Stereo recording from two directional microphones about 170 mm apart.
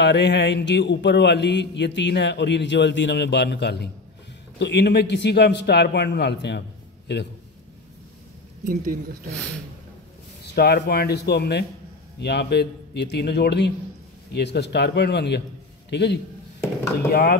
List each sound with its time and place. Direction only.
0.0 s a man's voice: 90° left
10.4 s speech: 75° left (ahead or behind)
12.2 s a man's voice: 85° left
15.9 s speech: 90° left
17.1 s speech: 60° left (ahead or behind)